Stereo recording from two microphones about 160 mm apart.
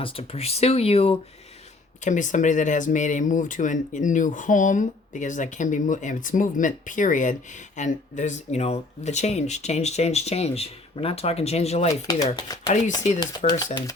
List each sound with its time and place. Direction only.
0.0 s speech: 35° left (ahead or behind)
2.0 s speech: 50° left (ahead or behind)
12.0 s speech: 20° left (ahead or behind)
13.4 s speech: 50° left (ahead or behind)